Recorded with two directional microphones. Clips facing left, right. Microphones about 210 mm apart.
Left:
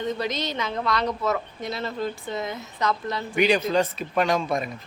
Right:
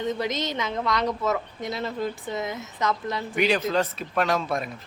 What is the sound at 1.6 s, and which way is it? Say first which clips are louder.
Speech: even; 15° right (ahead or behind).